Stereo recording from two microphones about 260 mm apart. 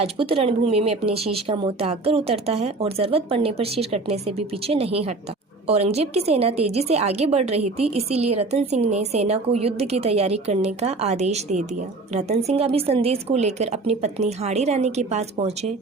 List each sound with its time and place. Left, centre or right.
0.0 s speech: right